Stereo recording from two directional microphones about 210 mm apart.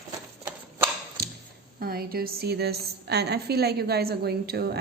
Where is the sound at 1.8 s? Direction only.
45° right (ahead or behind).